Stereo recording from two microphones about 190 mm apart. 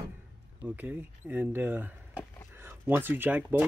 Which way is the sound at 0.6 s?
10° right (ahead or behind).